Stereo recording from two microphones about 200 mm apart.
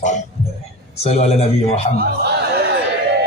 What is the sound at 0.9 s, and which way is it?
Speech, 30° left (ahead or behind).